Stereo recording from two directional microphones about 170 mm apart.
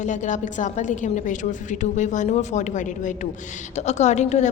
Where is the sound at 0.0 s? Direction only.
45° left (ahead or behind).